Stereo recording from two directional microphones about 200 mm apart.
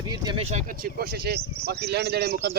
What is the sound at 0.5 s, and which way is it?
Speech, 45° right (ahead or behind).